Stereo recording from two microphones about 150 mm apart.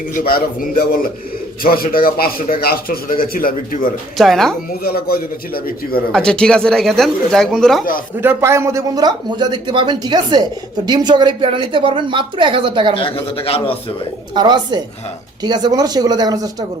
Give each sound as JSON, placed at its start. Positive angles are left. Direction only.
{"t": 0.1, "sound": "a man's voice", "side_deg": 65}
{"t": 1.6, "sound": "speech", "side_deg": 80}
{"t": 4.2, "sound": "speech", "side_deg": 0}
{"t": 4.8, "sound": "a man's voice", "side_deg": 90}
{"t": 6.1, "sound": "speech", "side_deg": 5}
{"t": 8.2, "sound": "speech", "side_deg": -15}
{"t": 13.3, "sound": "a man's voice", "side_deg": 40}
{"t": 14.3, "sound": "speech", "side_deg": -30}